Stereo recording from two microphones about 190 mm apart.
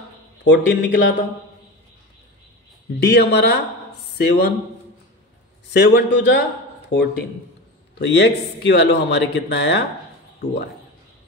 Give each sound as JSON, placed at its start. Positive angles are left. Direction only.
{"t": 0.4, "sound": "a man's voice", "side_deg": 65}
{"t": 3.0, "sound": "speech", "side_deg": 60}
{"t": 5.7, "sound": "a man's voice", "side_deg": 65}